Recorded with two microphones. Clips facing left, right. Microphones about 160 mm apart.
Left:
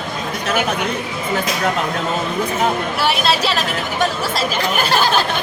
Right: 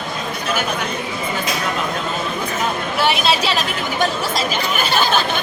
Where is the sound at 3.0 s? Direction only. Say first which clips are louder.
Right 3 dB; centre (ahead or behind).